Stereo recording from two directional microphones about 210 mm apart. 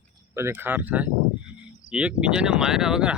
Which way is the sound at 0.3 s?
10° right (ahead or behind).